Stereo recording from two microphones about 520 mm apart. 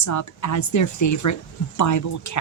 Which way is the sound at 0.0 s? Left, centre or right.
Left.